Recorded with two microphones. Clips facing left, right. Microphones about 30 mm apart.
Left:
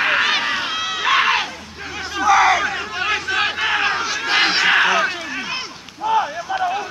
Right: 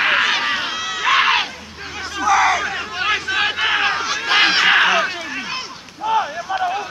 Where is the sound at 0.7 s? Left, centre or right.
Centre.